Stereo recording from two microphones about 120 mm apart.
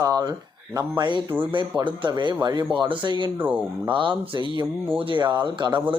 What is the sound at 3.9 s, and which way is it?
Speech, 40° right (ahead or behind).